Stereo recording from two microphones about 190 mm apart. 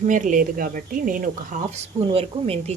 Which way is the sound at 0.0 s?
45° right (ahead or behind).